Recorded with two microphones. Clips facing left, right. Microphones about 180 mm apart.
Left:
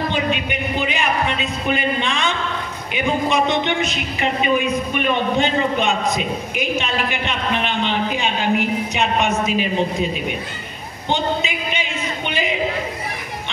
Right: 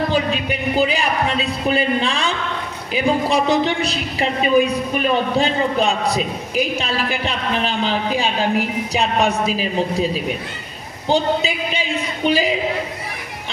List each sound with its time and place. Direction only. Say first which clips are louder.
0.1 s a woman's voice: right 2 dB; 35° right (ahead or behind)